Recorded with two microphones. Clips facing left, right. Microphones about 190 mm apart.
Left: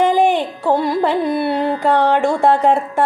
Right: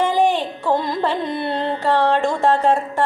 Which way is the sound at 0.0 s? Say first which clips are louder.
Left 3 dB; 15° left (ahead or behind).